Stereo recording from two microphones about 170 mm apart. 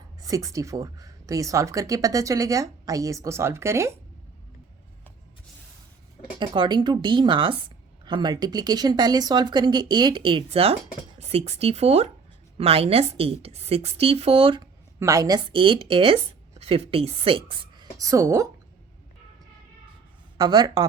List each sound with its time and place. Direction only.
0.2 s speech: 20° right (ahead or behind)
6.4 s a woman's voice: 25° right (ahead or behind)
14.9 s speech: 20° right (ahead or behind)
20.4 s speech: 25° right (ahead or behind)